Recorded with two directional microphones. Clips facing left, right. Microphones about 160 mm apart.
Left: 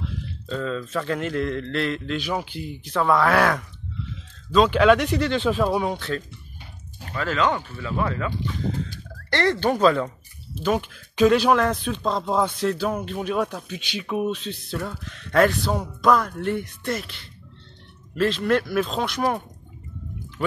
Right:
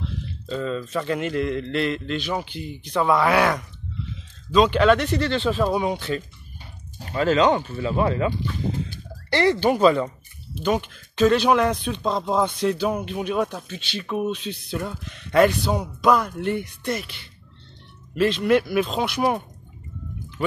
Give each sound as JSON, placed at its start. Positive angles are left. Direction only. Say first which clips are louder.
{"t": 0.5, "sound": "speech", "louder": "right 1 dB", "side_deg": -5}
{"t": 7.1, "sound": "speech", "louder": "right 5 dB", "side_deg": -25}
{"t": 9.3, "sound": "speech", "louder": "right 2 dB", "side_deg": -5}